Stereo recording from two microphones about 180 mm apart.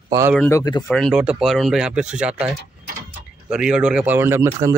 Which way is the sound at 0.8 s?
5° left (ahead or behind).